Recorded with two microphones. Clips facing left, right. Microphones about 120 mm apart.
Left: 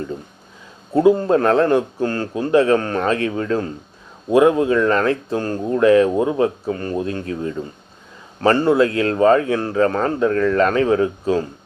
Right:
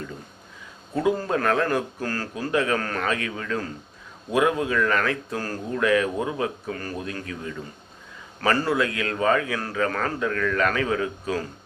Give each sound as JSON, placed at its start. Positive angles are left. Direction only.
{"t": 0.9, "sound": "speech", "side_deg": 25}